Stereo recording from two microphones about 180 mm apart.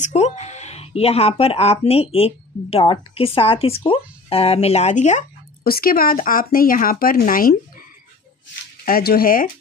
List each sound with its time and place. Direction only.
0.0 s speech: 40° left (ahead or behind)
8.8 s speech: 55° left (ahead or behind)